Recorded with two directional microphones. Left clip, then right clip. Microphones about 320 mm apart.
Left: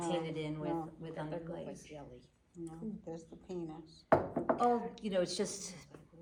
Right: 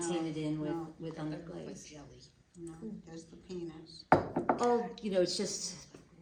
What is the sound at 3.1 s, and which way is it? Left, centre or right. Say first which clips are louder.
A woman's voice: left 2 dB; centre.